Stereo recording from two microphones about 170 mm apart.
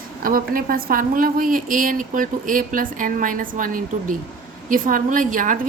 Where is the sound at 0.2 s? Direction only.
55° right (ahead or behind).